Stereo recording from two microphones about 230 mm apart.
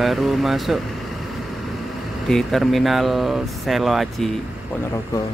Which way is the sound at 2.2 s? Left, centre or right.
Centre.